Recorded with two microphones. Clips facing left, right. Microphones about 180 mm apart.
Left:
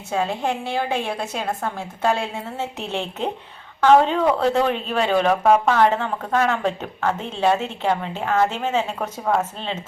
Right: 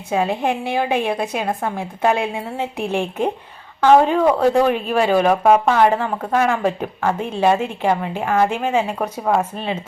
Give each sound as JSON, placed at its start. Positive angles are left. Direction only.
{"t": 0.1, "sound": "speech", "side_deg": -15}